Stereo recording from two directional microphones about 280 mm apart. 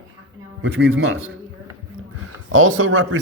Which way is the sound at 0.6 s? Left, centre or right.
Right.